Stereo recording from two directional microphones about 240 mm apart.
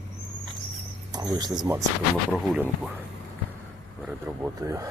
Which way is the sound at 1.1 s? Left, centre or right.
Centre.